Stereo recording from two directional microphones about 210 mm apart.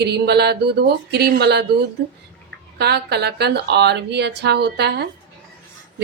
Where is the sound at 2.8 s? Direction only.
50° right (ahead or behind).